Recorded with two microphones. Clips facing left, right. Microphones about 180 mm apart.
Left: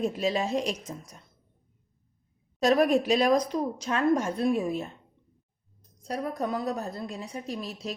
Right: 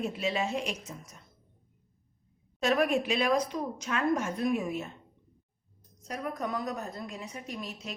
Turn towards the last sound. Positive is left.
turn(degrees=35)  # may be behind; listen again after turning